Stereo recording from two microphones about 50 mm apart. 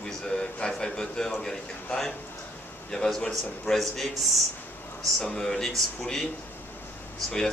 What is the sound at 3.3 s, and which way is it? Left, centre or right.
Speech, centre.